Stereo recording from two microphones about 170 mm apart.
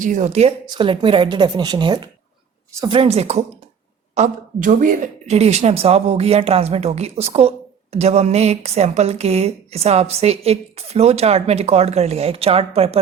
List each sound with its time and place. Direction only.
0.0 s speech: 45° right (ahead or behind)
0.7 s a woman's voice: 30° right (ahead or behind)